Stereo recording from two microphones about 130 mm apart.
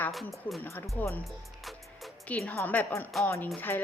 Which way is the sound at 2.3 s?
10° left (ahead or behind).